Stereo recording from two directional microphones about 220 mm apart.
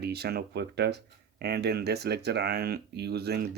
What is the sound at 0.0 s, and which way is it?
Speech, 45° right (ahead or behind).